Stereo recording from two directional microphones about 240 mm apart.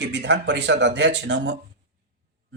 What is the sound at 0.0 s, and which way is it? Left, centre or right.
Speech, right.